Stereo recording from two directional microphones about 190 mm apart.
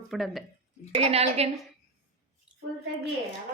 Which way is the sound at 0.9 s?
35° right (ahead or behind).